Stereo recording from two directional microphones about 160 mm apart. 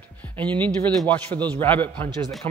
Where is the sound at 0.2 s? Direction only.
10° left (ahead or behind).